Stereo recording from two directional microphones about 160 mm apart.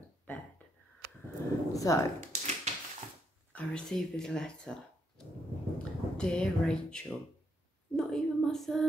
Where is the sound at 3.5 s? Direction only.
5° left (ahead or behind).